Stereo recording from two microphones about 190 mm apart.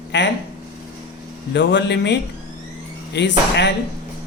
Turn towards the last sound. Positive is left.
turn(degrees=65)  # may be behind; listen again after turning